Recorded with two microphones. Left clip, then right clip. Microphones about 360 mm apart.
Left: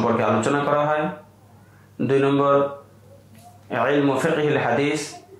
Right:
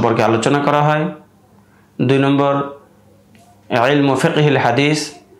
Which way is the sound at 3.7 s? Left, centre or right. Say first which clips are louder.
Right 8 dB; right.